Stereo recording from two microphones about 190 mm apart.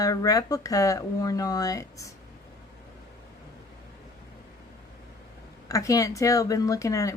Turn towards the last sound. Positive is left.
turn(degrees=15)  # may be behind; listen again after turning